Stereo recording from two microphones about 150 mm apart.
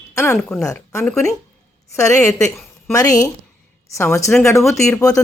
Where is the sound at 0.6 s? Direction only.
20° left (ahead or behind).